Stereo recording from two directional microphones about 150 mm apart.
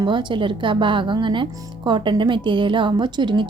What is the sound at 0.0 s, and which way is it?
A woman's voice, 30° right (ahead or behind).